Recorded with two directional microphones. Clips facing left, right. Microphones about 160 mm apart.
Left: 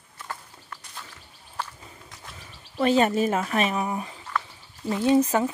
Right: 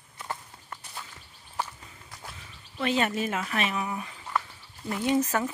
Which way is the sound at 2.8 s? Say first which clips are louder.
Left 6 dB; 35° left (ahead or behind).